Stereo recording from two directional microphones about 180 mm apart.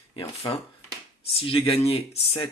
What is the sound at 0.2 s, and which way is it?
Speech, 30° left (ahead or behind).